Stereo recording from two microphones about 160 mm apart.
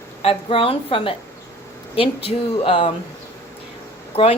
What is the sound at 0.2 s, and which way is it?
Speech, 40° left (ahead or behind).